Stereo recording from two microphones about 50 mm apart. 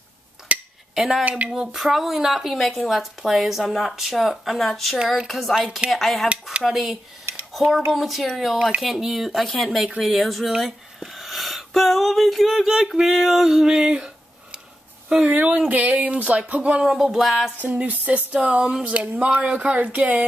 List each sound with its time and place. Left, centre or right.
0.5 s a sound: right
0.9 s a woman's voice: centre
9.8 s speech: centre
10.1 s a woman's voice: centre
15.2 s speech: right
16.8 s a woman's voice: centre
17.6 s a sound: right
18.3 s speech: right